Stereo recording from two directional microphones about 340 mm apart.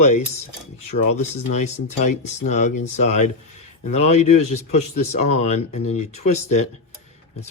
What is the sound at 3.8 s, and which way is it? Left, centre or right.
Speech, centre.